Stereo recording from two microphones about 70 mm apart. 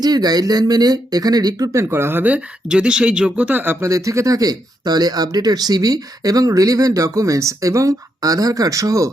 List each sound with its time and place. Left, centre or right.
0.0 s speech: right
1.7 s speech: right
3.8 s speech: right